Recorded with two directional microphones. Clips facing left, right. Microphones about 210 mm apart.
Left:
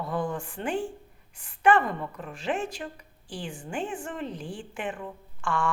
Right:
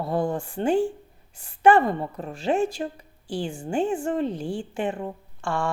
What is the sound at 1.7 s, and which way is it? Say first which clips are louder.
A woman's voice: right 5 dB; 35° right (ahead or behind).